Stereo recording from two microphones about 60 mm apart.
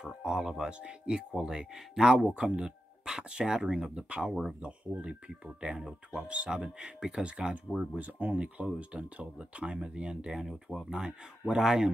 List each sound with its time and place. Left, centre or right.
0.0 s speech: centre